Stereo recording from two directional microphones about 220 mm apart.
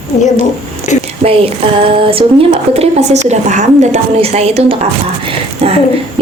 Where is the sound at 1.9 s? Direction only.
25° right (ahead or behind).